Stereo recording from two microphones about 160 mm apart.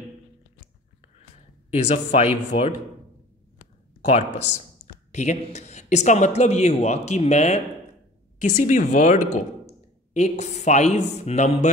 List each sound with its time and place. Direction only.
1.7 s speech: 45° left (ahead or behind)
4.0 s speech: 40° left (ahead or behind)